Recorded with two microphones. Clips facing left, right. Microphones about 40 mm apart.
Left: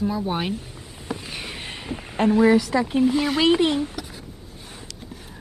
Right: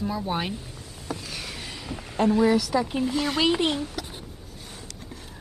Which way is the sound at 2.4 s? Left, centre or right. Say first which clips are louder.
Left 4 dB; left.